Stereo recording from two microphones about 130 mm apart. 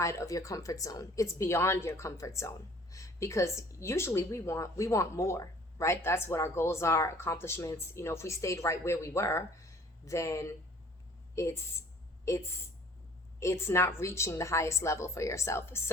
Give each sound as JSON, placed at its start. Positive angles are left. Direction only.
{"t": 0.0, "sound": "speech", "side_deg": 25}